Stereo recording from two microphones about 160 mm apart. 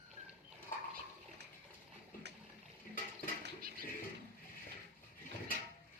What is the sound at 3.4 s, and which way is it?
Dishes, 65° right (ahead or behind).